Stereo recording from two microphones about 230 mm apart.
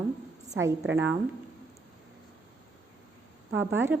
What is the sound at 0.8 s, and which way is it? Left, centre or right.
Speech, right.